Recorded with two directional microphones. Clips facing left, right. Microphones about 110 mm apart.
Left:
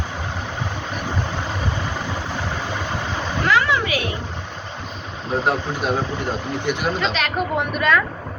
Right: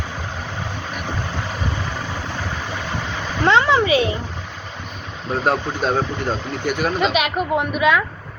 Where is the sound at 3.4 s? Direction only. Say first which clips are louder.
Right 5 dB; 30° right (ahead or behind).